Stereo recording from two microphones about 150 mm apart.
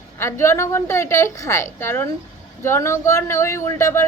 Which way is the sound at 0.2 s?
15° left (ahead or behind).